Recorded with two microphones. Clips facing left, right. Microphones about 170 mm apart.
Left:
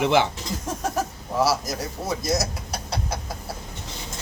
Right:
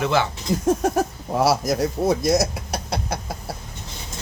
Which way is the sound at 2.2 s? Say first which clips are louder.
Right 6 dB; 60° right (ahead or behind).